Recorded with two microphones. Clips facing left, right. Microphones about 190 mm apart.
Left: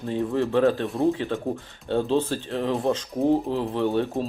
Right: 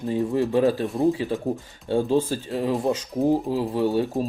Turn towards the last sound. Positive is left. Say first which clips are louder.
# right 1 dB
turn(degrees=-10)  # may be behind; listen again after turning